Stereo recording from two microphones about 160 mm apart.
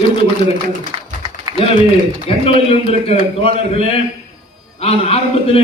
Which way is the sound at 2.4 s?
40° left (ahead or behind).